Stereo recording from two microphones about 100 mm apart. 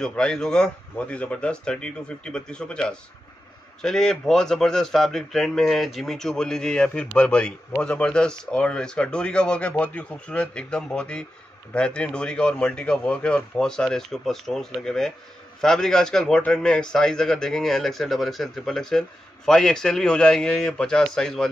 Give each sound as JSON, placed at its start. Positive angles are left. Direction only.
{"t": 0.0, "sound": "a man's voice", "side_deg": 5}